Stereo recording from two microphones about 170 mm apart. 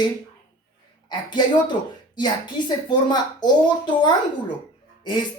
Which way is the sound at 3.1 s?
25° left (ahead or behind).